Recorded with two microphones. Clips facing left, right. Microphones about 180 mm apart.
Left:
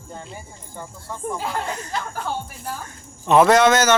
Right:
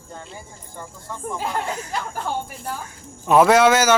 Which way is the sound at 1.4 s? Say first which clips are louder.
Right 4 dB; 5° right (ahead or behind).